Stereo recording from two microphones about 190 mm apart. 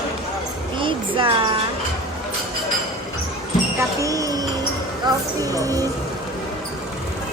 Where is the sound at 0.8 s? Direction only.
25° right (ahead or behind).